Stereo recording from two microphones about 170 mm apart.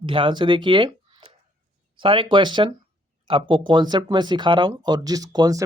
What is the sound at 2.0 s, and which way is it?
Speech, 30° right (ahead or behind).